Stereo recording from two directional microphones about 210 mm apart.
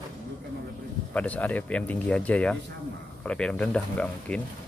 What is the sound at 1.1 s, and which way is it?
Speech, 5° left (ahead or behind).